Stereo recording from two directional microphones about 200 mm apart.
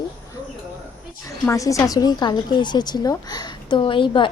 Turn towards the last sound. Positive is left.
turn(degrees=25)  # may be behind; listen again after turning